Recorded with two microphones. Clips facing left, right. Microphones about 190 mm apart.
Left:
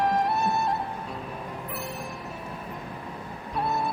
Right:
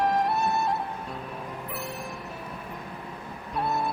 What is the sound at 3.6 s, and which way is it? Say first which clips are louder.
Cat: even; centre (ahead or behind).